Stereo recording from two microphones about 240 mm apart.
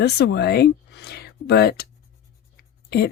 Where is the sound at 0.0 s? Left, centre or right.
Left.